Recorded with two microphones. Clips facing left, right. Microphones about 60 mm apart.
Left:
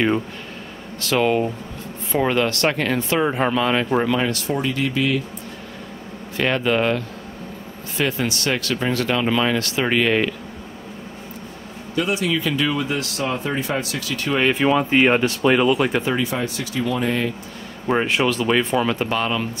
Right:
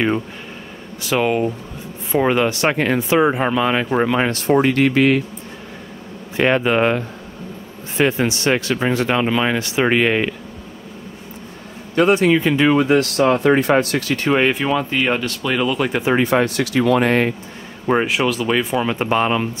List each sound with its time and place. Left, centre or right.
1.0 s speech: centre
4.2 s speech: right
6.3 s speech: right
11.9 s speech: right
12.7 s speech: right
14.5 s speech: centre
14.9 s speech: left
15.6 s speech: centre
16.2 s speech: right
17.8 s speech: centre
18.9 s speech: right